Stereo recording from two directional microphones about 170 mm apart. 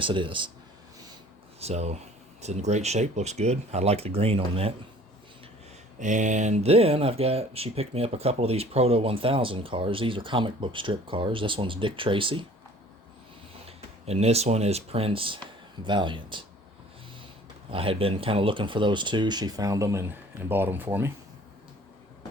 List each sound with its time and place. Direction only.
0.0 s speech: 30° right (ahead or behind)
1.5 s speech: 40° right (ahead or behind)
6.0 s speech: 45° right (ahead or behind); by 12.5 s 30° right (ahead or behind)
13.7 s speech: 40° right (ahead or behind)
17.7 s speech: 35° right (ahead or behind); by 21.1 s 10° right (ahead or behind)